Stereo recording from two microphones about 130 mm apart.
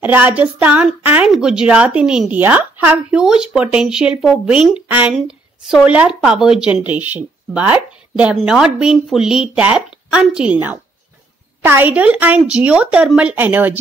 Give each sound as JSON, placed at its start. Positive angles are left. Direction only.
{"t": 0.0, "sound": "a woman's voice", "side_deg": -15}